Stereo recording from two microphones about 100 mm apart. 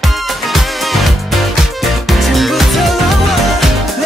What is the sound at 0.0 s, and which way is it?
Music, centre (ahead or behind).